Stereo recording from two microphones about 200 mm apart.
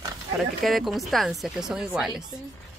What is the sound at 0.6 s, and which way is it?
Speech, centre (ahead or behind).